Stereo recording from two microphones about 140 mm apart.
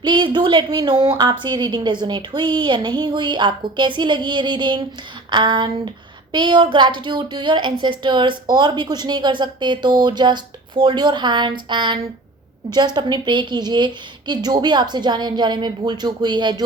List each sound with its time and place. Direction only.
0.0 s a woman's voice: 35° right (ahead or behind)